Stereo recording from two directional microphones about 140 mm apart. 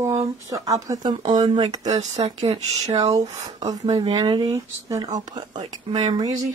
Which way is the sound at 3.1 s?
25° right (ahead or behind).